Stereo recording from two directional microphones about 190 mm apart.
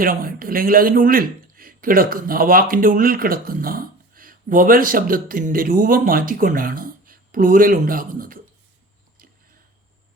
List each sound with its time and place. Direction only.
0.0 s speech: 50° right (ahead or behind)